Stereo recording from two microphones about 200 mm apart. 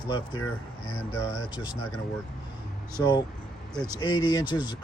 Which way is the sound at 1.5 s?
20° left (ahead or behind).